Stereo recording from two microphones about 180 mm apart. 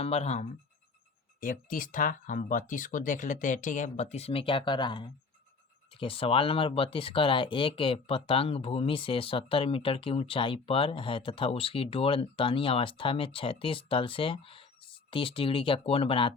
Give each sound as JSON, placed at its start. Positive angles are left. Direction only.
{"t": 0.0, "sound": "speech", "side_deg": 35}
{"t": 1.4, "sound": "speech", "side_deg": 50}